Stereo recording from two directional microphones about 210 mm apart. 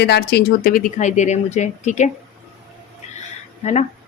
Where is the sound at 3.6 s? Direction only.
30° left (ahead or behind).